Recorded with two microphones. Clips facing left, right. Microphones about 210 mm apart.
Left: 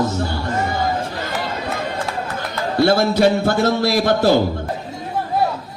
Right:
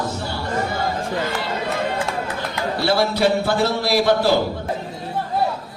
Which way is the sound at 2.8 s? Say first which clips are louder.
Left 5 dB; 50° left (ahead or behind).